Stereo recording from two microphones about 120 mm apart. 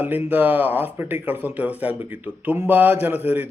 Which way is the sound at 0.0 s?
15° right (ahead or behind).